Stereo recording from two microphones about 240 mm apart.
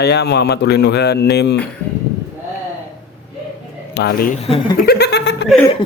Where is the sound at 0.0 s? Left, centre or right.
Left.